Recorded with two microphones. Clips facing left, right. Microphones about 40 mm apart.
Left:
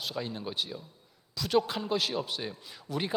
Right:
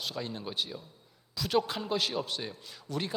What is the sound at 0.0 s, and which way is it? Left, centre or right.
Speech, centre.